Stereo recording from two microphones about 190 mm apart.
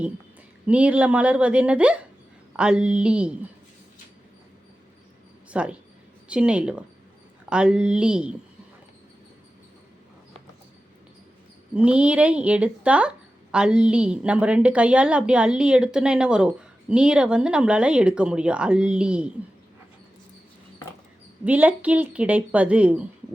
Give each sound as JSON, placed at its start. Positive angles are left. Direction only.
{"t": 0.7, "sound": "speech", "side_deg": -5}
{"t": 5.5, "sound": "speech", "side_deg": -5}
{"t": 11.7, "sound": "speech", "side_deg": -5}
{"t": 21.4, "sound": "speech", "side_deg": -10}